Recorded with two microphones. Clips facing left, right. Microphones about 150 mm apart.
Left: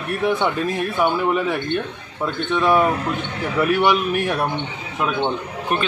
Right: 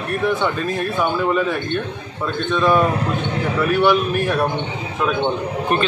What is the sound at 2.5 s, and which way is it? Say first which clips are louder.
A man's voice: right 1 dB; 10° left (ahead or behind).